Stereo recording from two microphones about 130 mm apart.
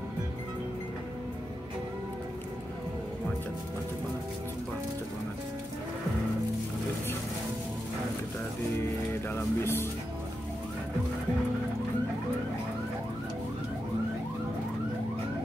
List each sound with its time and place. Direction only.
9.3 s speech: 20° left (ahead or behind)